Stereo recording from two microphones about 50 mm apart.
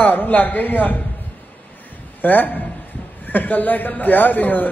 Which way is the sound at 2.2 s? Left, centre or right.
Left.